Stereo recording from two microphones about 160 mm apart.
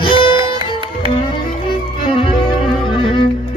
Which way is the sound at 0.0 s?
30° left (ahead or behind).